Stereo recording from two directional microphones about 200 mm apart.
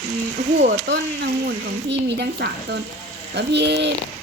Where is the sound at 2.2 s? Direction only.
55° right (ahead or behind).